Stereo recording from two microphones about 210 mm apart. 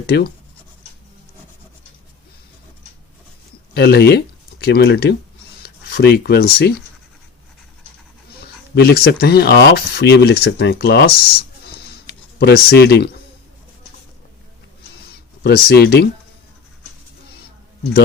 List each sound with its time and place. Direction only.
0.1 s speech: 50° left (ahead or behind)
3.8 s speech: 50° left (ahead or behind)
8.7 s speech: 50° left (ahead or behind)
15.4 s speech: 50° left (ahead or behind)